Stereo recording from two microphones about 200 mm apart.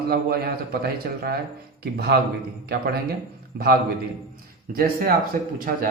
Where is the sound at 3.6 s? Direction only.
50° right (ahead or behind).